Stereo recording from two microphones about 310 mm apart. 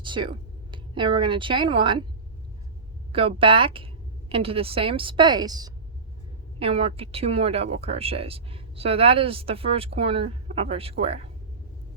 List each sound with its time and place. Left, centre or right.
0.0 s speech: centre
3.1 s a woman's voice: centre